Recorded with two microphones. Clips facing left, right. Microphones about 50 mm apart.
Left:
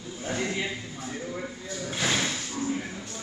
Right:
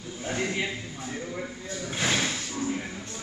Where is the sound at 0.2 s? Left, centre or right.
Centre.